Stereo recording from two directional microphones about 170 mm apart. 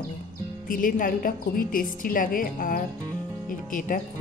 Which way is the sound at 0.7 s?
55° left (ahead or behind).